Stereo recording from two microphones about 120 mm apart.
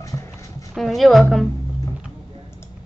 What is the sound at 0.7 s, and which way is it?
Speech, centre (ahead or behind).